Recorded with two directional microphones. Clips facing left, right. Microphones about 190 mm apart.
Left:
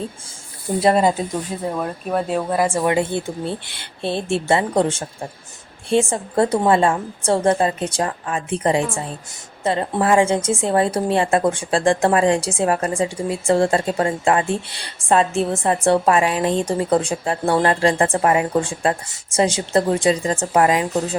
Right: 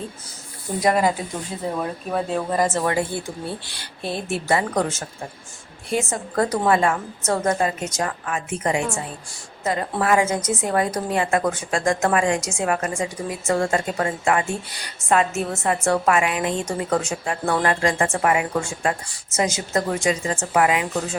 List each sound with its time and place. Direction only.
0.8 s speech: 25° left (ahead or behind)
1.8 s speech: 5° left (ahead or behind)
2.9 s a woman's voice: 20° left (ahead or behind)